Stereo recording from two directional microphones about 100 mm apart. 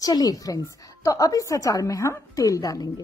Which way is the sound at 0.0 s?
40° left (ahead or behind).